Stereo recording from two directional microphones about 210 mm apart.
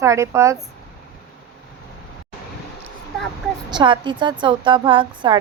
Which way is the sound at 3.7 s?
20° right (ahead or behind).